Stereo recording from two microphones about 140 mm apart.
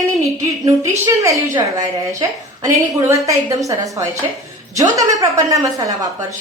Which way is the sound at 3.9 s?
20° right (ahead or behind).